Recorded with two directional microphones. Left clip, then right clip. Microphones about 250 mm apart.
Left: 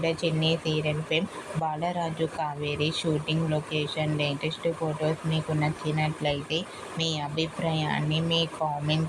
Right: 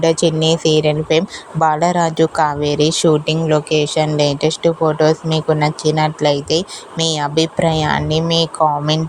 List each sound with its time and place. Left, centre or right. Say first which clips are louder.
0.0 s speech: right 13 dB; right